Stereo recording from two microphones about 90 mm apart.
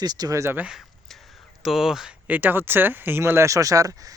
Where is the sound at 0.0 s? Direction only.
45° right (ahead or behind).